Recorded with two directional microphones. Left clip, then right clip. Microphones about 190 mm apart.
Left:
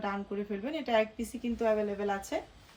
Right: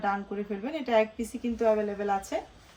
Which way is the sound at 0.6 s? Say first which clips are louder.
Right 4 dB; 5° right (ahead or behind).